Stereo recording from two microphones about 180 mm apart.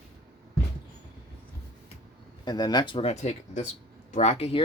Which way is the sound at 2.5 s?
25° left (ahead or behind).